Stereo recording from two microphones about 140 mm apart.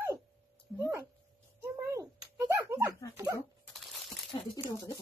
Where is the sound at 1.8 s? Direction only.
20° right (ahead or behind).